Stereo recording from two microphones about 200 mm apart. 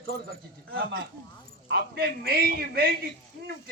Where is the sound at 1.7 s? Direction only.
50° right (ahead or behind).